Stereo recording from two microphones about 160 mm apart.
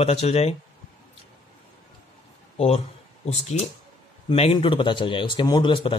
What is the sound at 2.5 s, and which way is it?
A man's voice, 40° left (ahead or behind).